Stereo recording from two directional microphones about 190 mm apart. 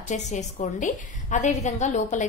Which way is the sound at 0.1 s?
40° left (ahead or behind).